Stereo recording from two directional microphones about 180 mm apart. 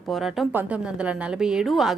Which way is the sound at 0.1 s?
Centre (ahead or behind).